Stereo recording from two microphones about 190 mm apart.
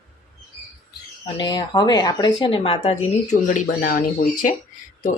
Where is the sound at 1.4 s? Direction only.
20° left (ahead or behind).